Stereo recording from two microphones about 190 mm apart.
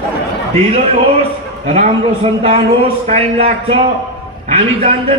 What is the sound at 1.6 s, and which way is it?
Speech, 35° right (ahead or behind).